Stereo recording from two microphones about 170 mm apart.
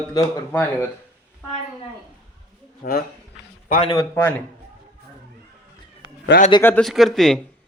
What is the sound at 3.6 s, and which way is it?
Speech, 45° left (ahead or behind).